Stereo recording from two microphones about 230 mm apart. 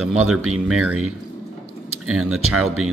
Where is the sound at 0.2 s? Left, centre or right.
Right.